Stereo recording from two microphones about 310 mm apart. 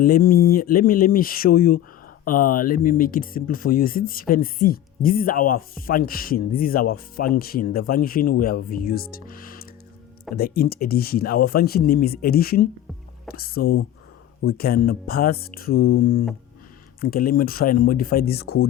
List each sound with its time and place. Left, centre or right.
0.0 s speech: left